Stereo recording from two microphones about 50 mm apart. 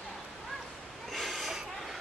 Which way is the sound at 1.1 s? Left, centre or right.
Centre.